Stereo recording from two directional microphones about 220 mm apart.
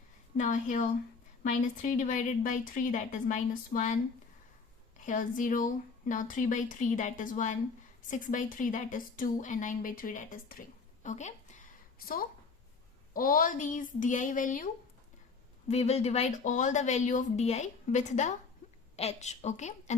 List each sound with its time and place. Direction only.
0.3 s speech: 35° left (ahead or behind)
4.9 s a woman's voice: 35° left (ahead or behind)
15.7 s speech: 30° left (ahead or behind)
18.6 s a sound: 35° left (ahead or behind)
18.9 s speech: 30° left (ahead or behind)